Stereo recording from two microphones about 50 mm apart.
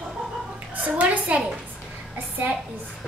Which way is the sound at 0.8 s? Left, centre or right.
Right.